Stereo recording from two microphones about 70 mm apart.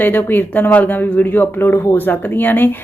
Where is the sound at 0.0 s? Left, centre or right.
Left.